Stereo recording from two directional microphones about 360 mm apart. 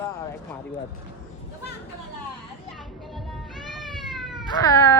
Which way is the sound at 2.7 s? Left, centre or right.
Centre.